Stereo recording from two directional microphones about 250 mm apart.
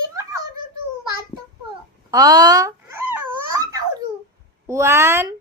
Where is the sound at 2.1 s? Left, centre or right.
Centre.